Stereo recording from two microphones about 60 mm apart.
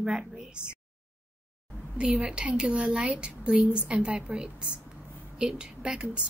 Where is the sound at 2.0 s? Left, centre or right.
Centre.